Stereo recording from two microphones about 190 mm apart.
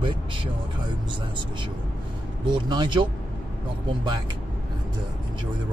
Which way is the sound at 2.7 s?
25° right (ahead or behind).